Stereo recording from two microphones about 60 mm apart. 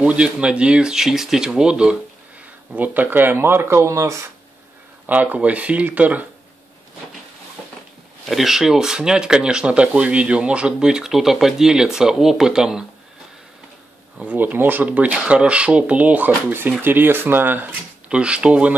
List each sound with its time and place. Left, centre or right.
0.0 s speech: centre
2.7 s speech: right
5.0 s speech: right
8.3 s speech: centre
14.1 s speech: right
18.0 s speech: centre